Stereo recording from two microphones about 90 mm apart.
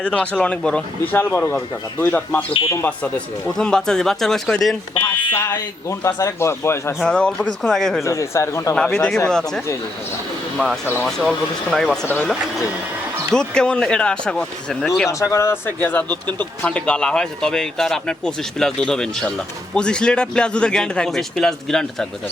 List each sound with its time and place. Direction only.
0.0 s speech: 15° left (ahead or behind)
3.5 s speech: 5° left (ahead or behind)
5.0 s speech: 25° left (ahead or behind)
5.5 s a man's voice: 35° left (ahead or behind)
7.0 s speech: 10° left (ahead or behind)
8.0 s a man's voice: 35° left (ahead or behind)
8.7 s speech: 10° left (ahead or behind)
11.0 s speech: centre (ahead or behind)
12.0 s speech: 20° left (ahead or behind)
13.3 s speech: 10° left (ahead or behind)
14.8 s speech: centre (ahead or behind)
15.2 s speech: 35° left (ahead or behind); by 22.0 s 5° left (ahead or behind)